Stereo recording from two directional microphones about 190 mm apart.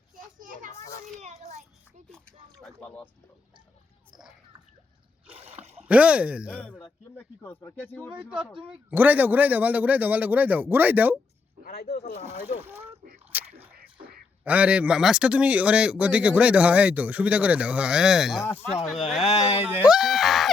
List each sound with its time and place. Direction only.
0.3 s children playing: 45° right (ahead or behind)
1.2 s child singing: 35° right (ahead or behind)
2.1 s a sound: 5° left (ahead or behind)
5.3 s a sound: 30° right (ahead or behind)
5.7 s speech: 5° right (ahead or behind)
7.6 s speech: 10° left (ahead or behind)
8.1 s speech: 5° right (ahead or behind)
11.6 s speech: 55° left (ahead or behind)
13.3 s biting: 10° right (ahead or behind)
14.4 s speech: 5° right (ahead or behind)
18.4 s speech: 35° left (ahead or behind)
18.9 s speech: centre (ahead or behind)
19.2 s speech: 35° left (ahead or behind)
19.6 s speech: 5° right (ahead or behind)